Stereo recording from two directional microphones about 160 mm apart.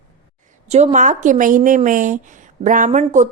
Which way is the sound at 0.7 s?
45° right (ahead or behind).